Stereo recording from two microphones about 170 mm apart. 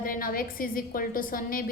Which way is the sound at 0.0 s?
55° left (ahead or behind).